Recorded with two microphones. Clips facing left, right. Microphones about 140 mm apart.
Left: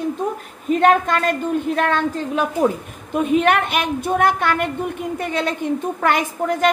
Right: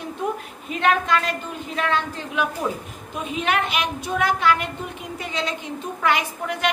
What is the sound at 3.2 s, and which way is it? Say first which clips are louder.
A woman's voice: left 8 dB; 55° left (ahead or behind).